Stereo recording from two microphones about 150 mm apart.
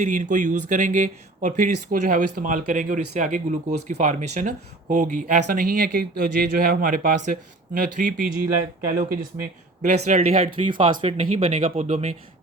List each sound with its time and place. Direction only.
0.0 s speech: 55° right (ahead or behind)
9.8 s speech: 50° right (ahead or behind)